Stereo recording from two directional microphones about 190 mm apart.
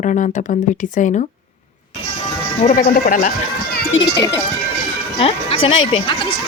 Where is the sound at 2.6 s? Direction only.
45° left (ahead or behind).